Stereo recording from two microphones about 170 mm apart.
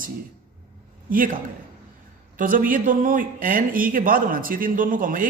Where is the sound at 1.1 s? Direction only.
55° right (ahead or behind).